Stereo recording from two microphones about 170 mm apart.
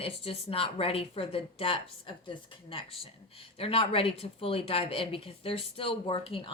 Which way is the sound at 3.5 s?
30° left (ahead or behind).